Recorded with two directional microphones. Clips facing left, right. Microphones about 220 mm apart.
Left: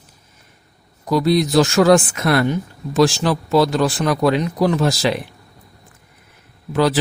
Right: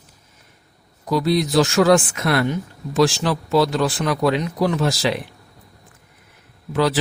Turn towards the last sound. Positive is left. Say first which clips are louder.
# left 2 dB
turn(degrees=45)  # may be behind; listen again after turning